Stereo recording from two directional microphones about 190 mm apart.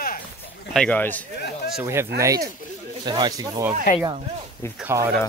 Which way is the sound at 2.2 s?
20° right (ahead or behind).